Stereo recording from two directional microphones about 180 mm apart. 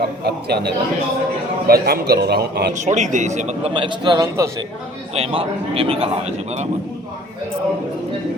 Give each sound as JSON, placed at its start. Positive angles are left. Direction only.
{"t": 0.0, "sound": "a man's voice", "side_deg": -65}
{"t": 2.7, "sound": "speech", "side_deg": -40}
{"t": 5.1, "sound": "speech", "side_deg": -35}